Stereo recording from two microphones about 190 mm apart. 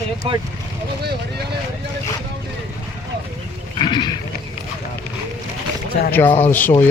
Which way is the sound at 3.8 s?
25° left (ahead or behind).